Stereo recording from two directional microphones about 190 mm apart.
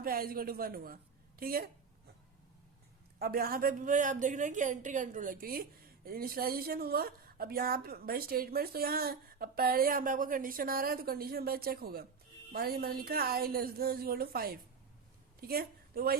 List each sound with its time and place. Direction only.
0.0 s a woman's voice: 50° right (ahead or behind)
3.2 s a woman's voice: 50° right (ahead or behind)